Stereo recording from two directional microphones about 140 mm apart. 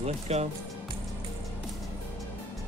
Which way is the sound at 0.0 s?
50° right (ahead or behind).